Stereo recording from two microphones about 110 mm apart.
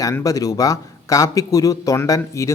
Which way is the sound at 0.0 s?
30° left (ahead or behind).